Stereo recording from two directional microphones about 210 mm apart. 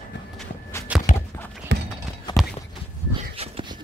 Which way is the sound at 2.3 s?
20° left (ahead or behind).